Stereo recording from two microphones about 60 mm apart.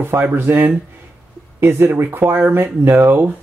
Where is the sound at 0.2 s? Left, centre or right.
Right.